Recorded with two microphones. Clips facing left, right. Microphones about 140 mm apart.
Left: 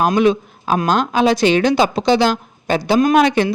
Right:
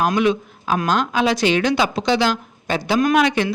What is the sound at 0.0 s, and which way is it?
Speech, 35° left (ahead or behind).